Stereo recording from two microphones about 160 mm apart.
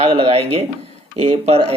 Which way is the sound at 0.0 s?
40° right (ahead or behind).